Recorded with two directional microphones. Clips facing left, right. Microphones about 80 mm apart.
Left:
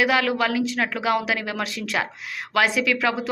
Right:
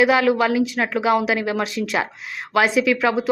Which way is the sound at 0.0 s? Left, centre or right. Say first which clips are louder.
Right 5 dB; right.